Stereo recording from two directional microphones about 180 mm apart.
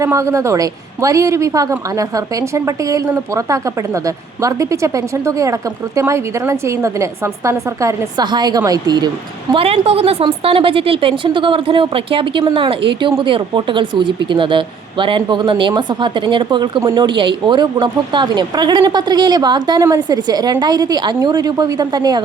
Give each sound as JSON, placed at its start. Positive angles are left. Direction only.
{"t": 0.0, "sound": "a woman's voice", "side_deg": -15}